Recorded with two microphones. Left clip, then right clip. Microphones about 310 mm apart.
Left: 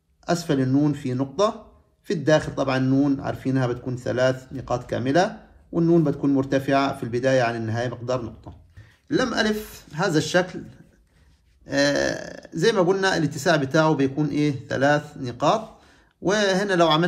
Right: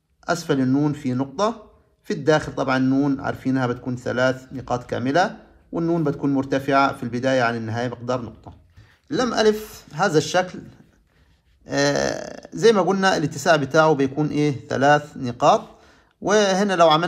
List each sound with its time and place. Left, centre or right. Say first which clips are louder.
0.2 s speech: right 2 dB; right
11.6 s speech: right 1 dB; right